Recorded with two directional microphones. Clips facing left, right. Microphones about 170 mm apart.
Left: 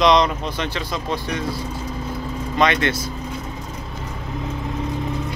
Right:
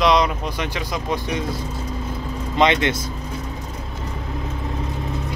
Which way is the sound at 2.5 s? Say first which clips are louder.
Right 1 dB; 20° right (ahead or behind).